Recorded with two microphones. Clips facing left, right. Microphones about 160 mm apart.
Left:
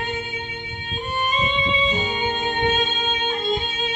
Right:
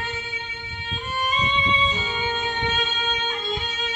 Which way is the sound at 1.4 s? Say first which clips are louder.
Left 2 dB; 50° left (ahead or behind).